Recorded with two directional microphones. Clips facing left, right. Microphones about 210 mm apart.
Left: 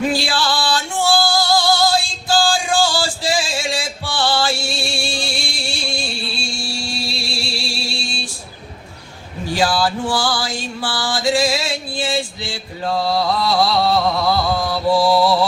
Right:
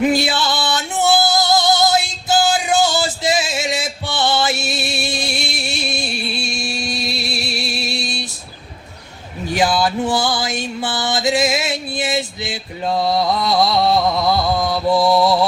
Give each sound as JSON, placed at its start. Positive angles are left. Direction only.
{"t": 0.0, "sound": "music", "side_deg": -20}
{"t": 9.5, "sound": "music", "side_deg": -20}